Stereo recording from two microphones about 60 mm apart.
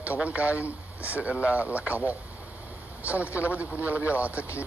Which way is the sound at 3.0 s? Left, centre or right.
Right.